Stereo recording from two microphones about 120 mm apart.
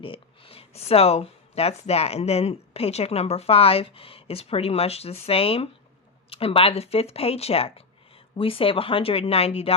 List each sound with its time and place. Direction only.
0.0 s speech: 50° left (ahead or behind)